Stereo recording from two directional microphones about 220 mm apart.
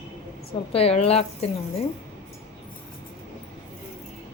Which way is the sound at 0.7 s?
25° left (ahead or behind).